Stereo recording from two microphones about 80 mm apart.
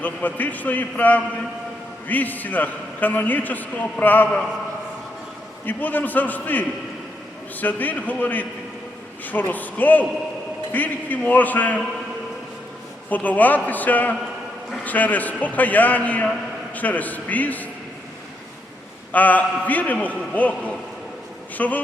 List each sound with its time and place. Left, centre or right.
0.0 s a man's voice: centre
5.6 s a man's voice: left
13.1 s a man's voice: left
19.1 s a man's voice: centre